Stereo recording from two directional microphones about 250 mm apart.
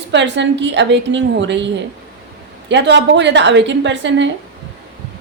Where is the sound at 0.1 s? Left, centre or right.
Right.